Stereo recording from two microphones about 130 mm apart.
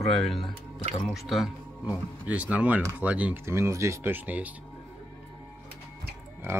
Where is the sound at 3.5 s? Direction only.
20° right (ahead or behind).